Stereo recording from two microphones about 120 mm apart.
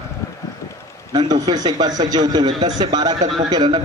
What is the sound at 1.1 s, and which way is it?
A man's voice, 35° right (ahead or behind).